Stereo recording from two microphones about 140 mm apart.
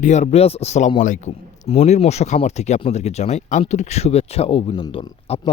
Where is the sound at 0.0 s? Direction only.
55° left (ahead or behind).